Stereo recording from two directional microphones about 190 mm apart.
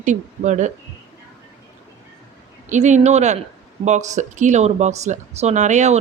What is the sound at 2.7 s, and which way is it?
Speech, 40° right (ahead or behind).